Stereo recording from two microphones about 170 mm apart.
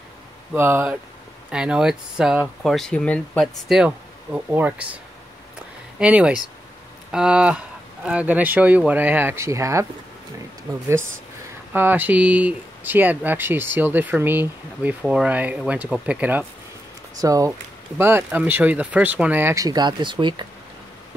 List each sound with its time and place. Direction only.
0.5 s speech: 10° right (ahead or behind)
11.7 s speech: 10° right (ahead or behind)
17.2 s speech: 20° right (ahead or behind)